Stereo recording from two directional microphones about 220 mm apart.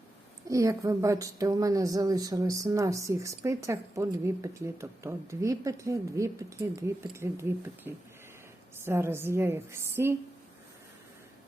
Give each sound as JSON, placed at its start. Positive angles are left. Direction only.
{"t": 0.4, "sound": "a woman's voice", "side_deg": -15}